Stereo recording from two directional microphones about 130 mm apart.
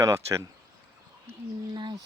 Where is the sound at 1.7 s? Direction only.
35° right (ahead or behind).